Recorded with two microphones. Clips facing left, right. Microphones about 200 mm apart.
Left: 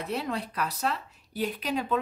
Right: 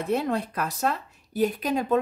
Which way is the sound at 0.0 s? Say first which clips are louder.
Right 6 dB; 50° right (ahead or behind).